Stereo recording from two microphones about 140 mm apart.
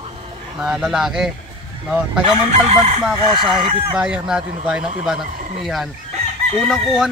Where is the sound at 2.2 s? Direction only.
50° right (ahead or behind).